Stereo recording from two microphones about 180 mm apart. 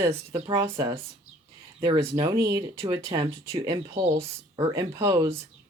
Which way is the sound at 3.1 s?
30° right (ahead or behind).